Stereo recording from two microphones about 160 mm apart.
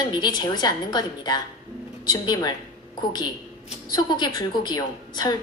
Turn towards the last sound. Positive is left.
turn(degrees=25)  # may be behind; listen again after turning